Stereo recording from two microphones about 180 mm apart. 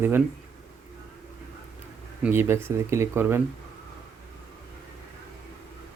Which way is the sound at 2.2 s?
10° right (ahead or behind).